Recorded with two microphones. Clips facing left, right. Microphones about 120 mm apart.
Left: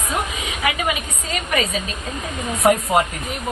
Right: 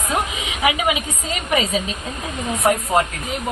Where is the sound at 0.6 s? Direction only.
15° right (ahead or behind).